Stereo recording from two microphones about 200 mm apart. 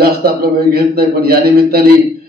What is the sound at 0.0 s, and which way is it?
A man's voice, 50° right (ahead or behind).